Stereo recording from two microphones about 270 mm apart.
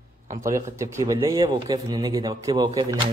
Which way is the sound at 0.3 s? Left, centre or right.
Centre.